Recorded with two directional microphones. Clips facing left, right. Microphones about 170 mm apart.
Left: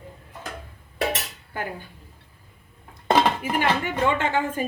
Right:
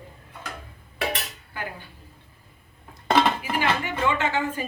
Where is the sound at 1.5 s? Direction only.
45° left (ahead or behind).